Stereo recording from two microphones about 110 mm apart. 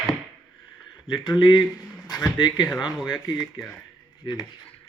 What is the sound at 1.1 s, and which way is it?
Speech, 40° left (ahead or behind).